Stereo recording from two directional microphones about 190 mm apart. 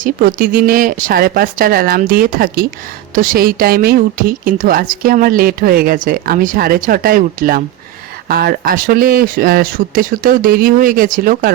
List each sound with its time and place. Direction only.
0.0 s a woman's voice: 45° right (ahead or behind)